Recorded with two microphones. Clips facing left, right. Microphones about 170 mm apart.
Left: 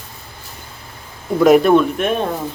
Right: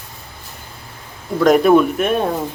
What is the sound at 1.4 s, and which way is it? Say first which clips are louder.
Speech: left 1 dB; 5° left (ahead or behind).